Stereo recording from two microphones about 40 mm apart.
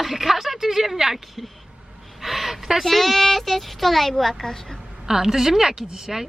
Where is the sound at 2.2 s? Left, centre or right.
Centre.